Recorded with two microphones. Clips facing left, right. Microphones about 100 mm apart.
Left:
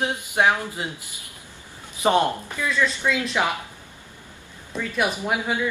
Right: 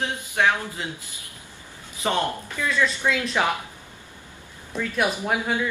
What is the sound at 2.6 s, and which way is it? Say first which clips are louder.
Speech: even; centre (ahead or behind).